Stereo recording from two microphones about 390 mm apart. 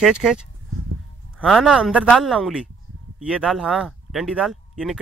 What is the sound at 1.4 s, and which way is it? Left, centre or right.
Speech, centre.